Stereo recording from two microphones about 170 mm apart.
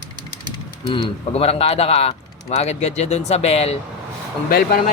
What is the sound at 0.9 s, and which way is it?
Speech, 35° left (ahead or behind).